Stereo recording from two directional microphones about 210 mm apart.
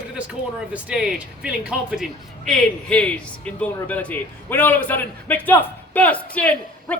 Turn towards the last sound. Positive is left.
turn(degrees=5)  # may be behind; listen again after turning